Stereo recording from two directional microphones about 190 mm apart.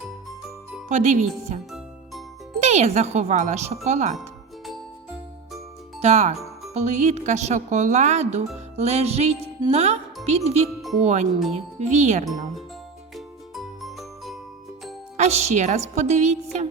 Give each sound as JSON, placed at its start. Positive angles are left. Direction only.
{"t": 0.9, "sound": "speech", "side_deg": -35}
{"t": 2.6, "sound": "speech", "side_deg": -35}
{"t": 6.0, "sound": "speech", "side_deg": -35}
{"t": 13.1, "sound": "music", "side_deg": 0}
{"t": 15.2, "sound": "speech", "side_deg": -35}